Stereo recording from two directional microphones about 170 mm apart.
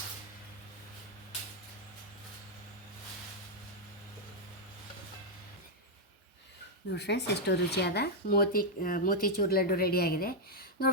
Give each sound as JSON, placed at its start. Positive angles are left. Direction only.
{"t": 6.9, "sound": "speech", "side_deg": 80}